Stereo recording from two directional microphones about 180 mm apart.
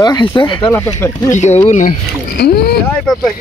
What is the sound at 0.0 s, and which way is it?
Speech, 20° left (ahead or behind).